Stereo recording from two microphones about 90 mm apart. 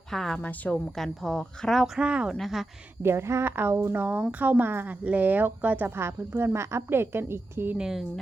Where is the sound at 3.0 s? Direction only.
30° right (ahead or behind).